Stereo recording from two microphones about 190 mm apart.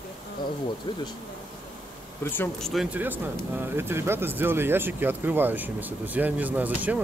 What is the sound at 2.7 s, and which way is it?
Speech, 5° right (ahead or behind).